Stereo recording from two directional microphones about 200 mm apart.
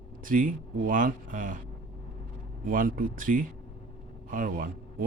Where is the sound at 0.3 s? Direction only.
40° right (ahead or behind).